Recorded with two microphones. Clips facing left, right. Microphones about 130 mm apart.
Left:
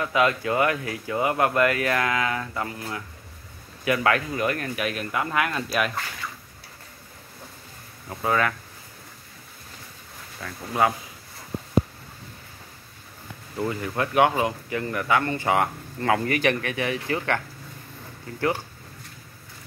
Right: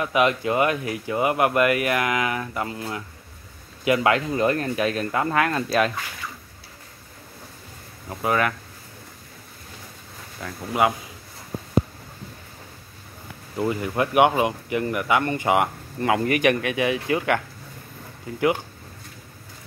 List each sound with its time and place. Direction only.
0.0 s speech: 20° right (ahead or behind)
8.1 s speech: 15° right (ahead or behind)
10.4 s speech: 15° right (ahead or behind)
13.6 s speech: 15° right (ahead or behind)